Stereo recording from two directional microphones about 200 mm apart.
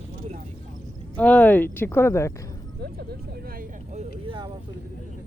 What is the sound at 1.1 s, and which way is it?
Speech, 5° left (ahead or behind).